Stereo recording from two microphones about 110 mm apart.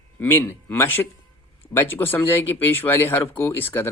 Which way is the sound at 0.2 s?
20° left (ahead or behind).